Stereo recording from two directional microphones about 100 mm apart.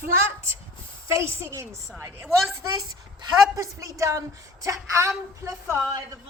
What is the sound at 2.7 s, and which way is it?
Speech, 45° right (ahead or behind).